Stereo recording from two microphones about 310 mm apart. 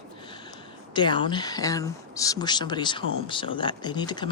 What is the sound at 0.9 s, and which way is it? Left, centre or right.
Speech, centre.